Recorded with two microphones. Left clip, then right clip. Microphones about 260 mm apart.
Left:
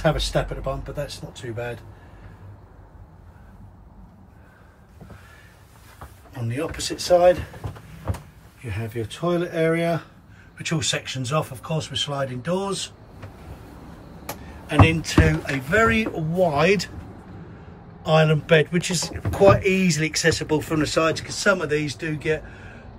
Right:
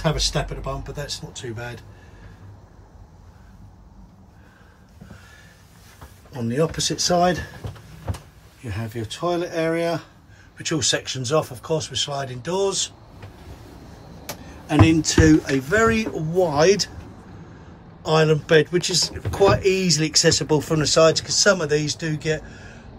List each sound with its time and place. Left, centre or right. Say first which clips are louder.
0.0 s speech: left 1 dB; centre
8.6 s speech: even; centre
14.7 s speech: right 2 dB; centre
18.0 s speech: right 1 dB; centre